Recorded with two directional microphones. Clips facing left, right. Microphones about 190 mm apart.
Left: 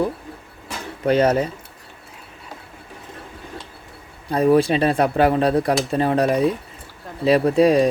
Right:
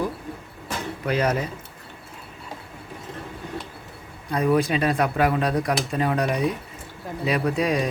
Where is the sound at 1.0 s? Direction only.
30° left (ahead or behind).